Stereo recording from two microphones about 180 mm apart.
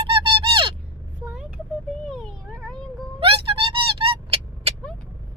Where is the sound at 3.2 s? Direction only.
30° right (ahead or behind).